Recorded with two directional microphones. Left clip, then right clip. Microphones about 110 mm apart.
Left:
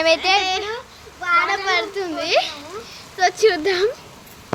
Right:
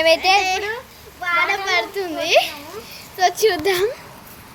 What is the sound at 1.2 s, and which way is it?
A child's voice, 15° right (ahead or behind).